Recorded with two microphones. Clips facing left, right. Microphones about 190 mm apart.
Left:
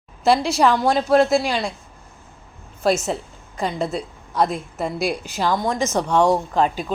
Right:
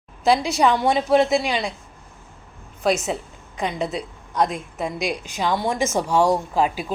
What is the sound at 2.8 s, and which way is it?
Speech, centre (ahead or behind).